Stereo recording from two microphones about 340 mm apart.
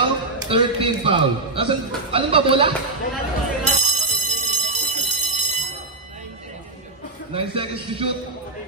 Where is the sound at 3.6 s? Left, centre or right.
Centre.